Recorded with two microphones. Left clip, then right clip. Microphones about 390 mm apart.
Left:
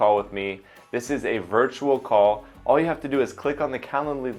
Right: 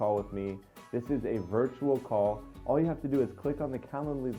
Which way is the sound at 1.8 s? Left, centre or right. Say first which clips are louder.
Left 8 dB; centre.